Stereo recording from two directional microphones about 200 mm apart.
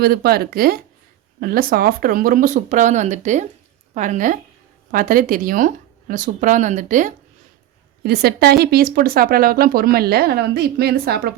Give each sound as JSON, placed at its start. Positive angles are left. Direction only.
{"t": 0.0, "sound": "speech", "side_deg": -50}
{"t": 8.0, "sound": "speech", "side_deg": -50}